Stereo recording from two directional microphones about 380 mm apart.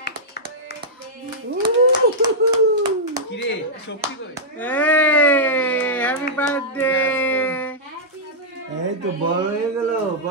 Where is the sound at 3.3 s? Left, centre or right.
Left.